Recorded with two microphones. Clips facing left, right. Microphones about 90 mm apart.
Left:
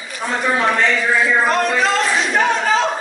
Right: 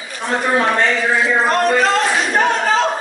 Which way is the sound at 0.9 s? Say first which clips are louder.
Even; 20° right (ahead or behind).